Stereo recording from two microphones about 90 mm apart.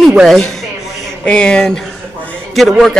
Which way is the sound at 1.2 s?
10° left (ahead or behind).